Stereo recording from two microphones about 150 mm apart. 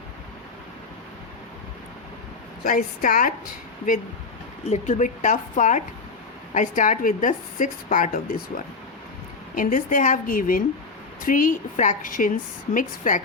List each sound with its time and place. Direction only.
2.6 s a woman's voice: 65° left (ahead or behind)
4.6 s a woman's voice: 50° left (ahead or behind)
9.6 s a woman's voice: 60° left (ahead or behind)